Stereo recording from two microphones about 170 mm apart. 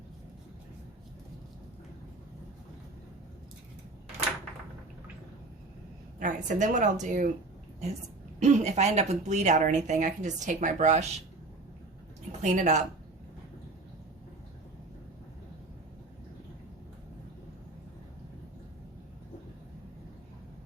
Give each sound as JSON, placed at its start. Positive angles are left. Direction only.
{"t": 6.1, "sound": "speech", "side_deg": -50}
{"t": 8.4, "sound": "speech", "side_deg": -45}
{"t": 12.3, "sound": "speech", "side_deg": -45}